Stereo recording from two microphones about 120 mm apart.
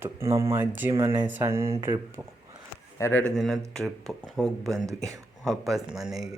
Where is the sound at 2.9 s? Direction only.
25° left (ahead or behind).